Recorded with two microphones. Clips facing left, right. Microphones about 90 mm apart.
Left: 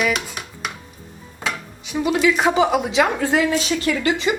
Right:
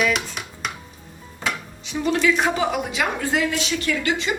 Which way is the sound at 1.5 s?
5° left (ahead or behind).